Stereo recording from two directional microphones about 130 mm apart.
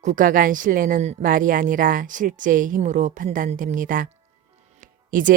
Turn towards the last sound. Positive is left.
turn(degrees=-90)